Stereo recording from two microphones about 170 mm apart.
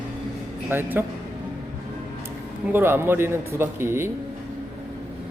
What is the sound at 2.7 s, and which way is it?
Speech, 15° right (ahead or behind).